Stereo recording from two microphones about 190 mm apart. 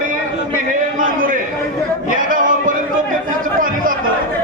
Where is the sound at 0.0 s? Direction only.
45° right (ahead or behind).